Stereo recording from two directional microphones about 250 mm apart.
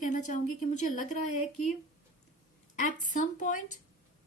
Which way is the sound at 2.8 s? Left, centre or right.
Left.